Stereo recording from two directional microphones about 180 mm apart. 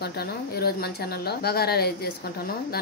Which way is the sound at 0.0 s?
60° left (ahead or behind).